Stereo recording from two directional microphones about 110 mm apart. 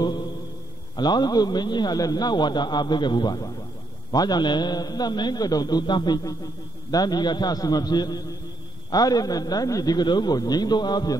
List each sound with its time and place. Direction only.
0.9 s a man's voice: 40° left (ahead or behind)